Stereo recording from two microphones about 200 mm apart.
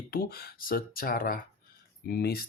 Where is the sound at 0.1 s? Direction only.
50° left (ahead or behind).